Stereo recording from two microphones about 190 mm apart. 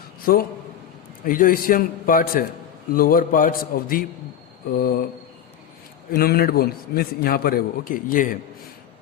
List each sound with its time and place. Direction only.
0.2 s a man's voice: 50° left (ahead or behind)
6.1 s a man's voice: 50° left (ahead or behind)